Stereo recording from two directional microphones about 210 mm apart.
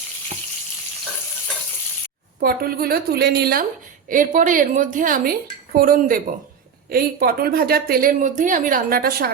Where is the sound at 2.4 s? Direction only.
45° right (ahead or behind).